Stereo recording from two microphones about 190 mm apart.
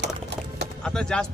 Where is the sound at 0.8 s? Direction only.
5° left (ahead or behind).